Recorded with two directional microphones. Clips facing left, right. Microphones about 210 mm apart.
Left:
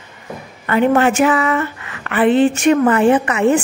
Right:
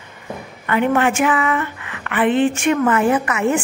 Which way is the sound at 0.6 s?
35° left (ahead or behind).